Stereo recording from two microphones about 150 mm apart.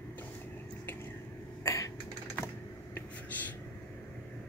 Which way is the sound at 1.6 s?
20° left (ahead or behind).